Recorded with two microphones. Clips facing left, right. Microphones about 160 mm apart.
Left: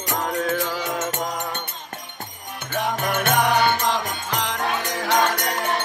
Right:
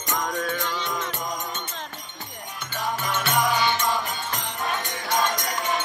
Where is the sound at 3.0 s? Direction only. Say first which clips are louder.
Left 3 dB; 55° left (ahead or behind).